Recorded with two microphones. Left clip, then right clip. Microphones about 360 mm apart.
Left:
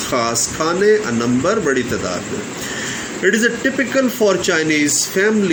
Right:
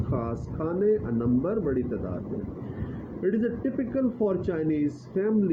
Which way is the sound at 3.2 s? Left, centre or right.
Right.